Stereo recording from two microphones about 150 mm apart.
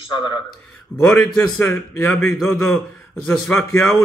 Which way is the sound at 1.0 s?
15° left (ahead or behind).